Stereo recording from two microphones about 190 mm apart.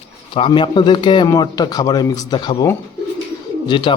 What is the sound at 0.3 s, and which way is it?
Speech, 25° left (ahead or behind).